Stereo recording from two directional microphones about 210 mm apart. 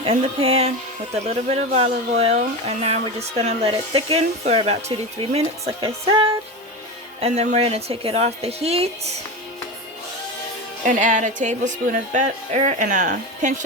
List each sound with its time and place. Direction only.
0.0 s speech: 25° right (ahead or behind)
7.2 s speech: 30° right (ahead or behind)
10.8 s speech: 35° right (ahead or behind)